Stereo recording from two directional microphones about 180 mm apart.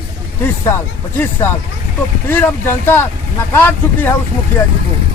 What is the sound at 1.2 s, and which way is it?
A man's voice, 10° left (ahead or behind).